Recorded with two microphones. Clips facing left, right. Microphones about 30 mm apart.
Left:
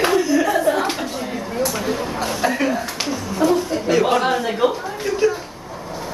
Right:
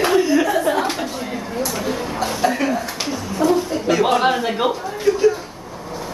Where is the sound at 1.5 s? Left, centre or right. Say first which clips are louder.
Left 1 dB; centre.